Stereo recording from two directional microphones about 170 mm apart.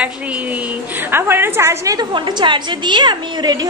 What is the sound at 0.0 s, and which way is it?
A woman's voice, 10° right (ahead or behind).